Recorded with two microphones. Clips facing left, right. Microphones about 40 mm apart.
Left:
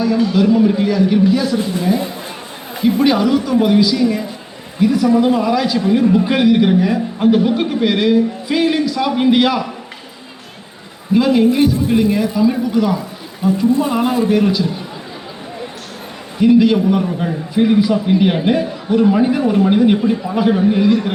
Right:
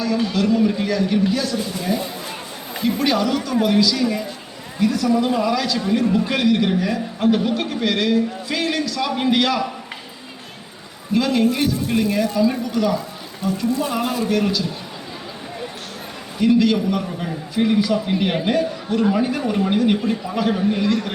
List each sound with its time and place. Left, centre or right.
0.3 s a man's voice: centre
1.5 s a woman's voice: left
11.1 s a man's voice: centre
16.4 s a man's voice: centre